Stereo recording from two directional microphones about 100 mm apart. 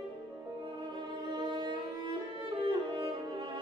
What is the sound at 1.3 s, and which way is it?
Music, 50° right (ahead or behind).